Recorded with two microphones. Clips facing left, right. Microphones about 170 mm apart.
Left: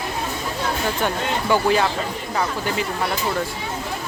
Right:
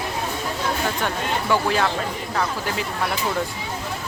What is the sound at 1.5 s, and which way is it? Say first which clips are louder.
Speech: left 3 dB; centre (ahead or behind).